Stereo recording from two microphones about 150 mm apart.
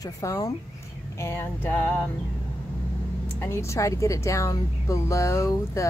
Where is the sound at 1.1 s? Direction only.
15° left (ahead or behind).